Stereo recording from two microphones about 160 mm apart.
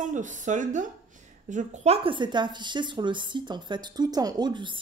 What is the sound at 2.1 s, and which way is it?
A woman's voice, 30° right (ahead or behind).